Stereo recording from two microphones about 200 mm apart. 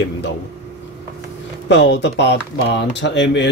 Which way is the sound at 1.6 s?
60° left (ahead or behind).